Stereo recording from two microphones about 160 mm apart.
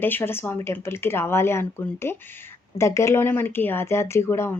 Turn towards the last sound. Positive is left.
turn(degrees=15)  # may be behind; listen again after turning